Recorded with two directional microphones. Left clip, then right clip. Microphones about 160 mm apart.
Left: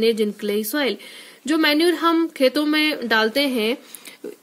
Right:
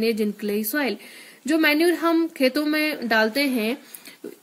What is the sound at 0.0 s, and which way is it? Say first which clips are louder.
Speech: left 4 dB; 30° left (ahead or behind).